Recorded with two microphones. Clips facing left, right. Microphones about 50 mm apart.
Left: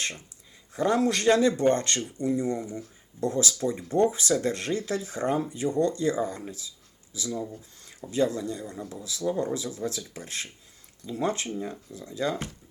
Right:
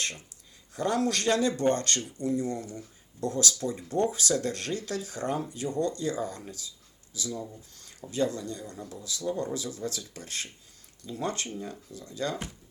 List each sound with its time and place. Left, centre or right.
0.7 s speech: left
7.3 s speech: centre
8.1 s speech: left